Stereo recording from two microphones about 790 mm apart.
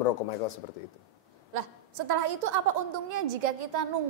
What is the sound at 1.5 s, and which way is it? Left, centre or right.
A woman's voice, right.